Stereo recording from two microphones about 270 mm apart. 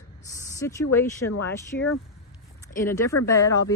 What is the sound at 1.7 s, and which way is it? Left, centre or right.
Speech, left.